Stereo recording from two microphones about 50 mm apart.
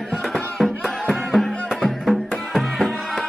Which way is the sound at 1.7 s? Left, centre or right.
Centre.